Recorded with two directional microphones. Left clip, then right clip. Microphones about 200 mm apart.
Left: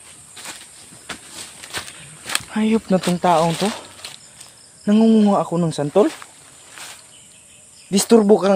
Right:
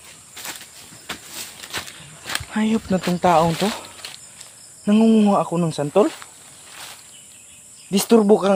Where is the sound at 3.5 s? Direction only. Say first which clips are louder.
Even; 10° left (ahead or behind).